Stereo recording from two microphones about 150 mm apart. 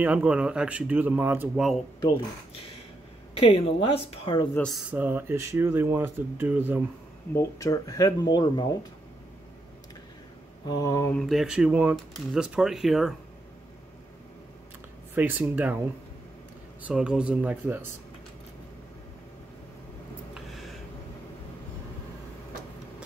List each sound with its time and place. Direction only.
0.0 s speech: 10° right (ahead or behind)
3.3 s speech: 40° left (ahead or behind)
4.6 s speech: centre (ahead or behind)
4.9 s speech: 15° right (ahead or behind)
7.3 s speech: 20° left (ahead or behind)
10.7 s speech: 25° left (ahead or behind)
11.1 s speech: centre (ahead or behind)
15.1 s speech: 15° right (ahead or behind)
16.8 s speech: 5° right (ahead or behind)